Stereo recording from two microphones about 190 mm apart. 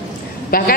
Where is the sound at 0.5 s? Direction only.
50° left (ahead or behind).